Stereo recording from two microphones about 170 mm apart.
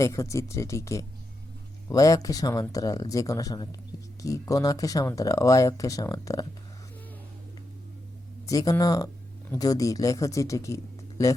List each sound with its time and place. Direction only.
0.0 s speech: 15° left (ahead or behind)
8.4 s speech: 20° left (ahead or behind)